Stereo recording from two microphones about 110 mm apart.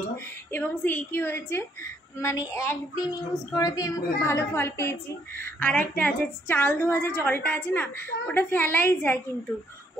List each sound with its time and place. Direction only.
0.5 s speech: 15° left (ahead or behind)